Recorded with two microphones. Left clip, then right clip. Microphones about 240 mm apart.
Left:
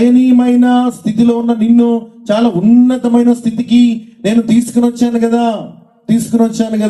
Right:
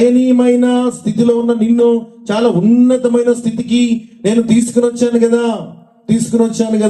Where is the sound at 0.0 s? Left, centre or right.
Left.